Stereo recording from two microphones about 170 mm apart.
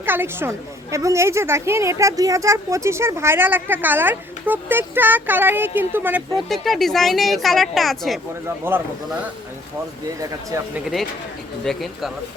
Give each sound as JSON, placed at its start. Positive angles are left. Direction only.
{"t": 0.0, "sound": "a woman's voice", "side_deg": -15}
{"t": 6.3, "sound": "speech", "side_deg": 0}
{"t": 8.4, "sound": "a woman's voice", "side_deg": -15}
{"t": 10.5, "sound": "speech", "side_deg": -20}
{"t": 11.6, "sound": "speech", "side_deg": 0}